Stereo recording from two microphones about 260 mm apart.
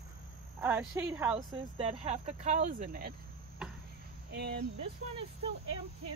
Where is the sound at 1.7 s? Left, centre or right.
Right.